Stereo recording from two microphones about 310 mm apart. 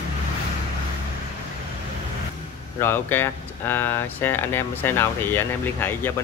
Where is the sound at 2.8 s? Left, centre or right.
Centre.